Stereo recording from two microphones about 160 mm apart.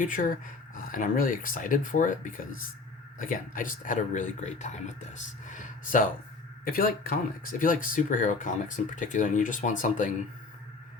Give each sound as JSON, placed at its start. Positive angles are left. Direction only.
{"t": 0.0, "sound": "speech", "side_deg": 55}
{"t": 6.7, "sound": "speech", "side_deg": 65}